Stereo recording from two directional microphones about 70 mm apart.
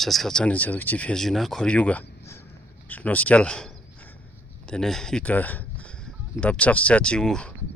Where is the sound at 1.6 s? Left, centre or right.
Centre.